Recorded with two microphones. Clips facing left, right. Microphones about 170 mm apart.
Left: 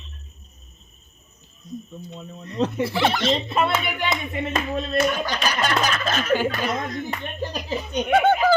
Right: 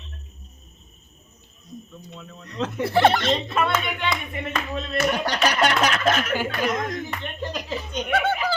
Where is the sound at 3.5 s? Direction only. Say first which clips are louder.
Left 1 dB; 30° left (ahead or behind).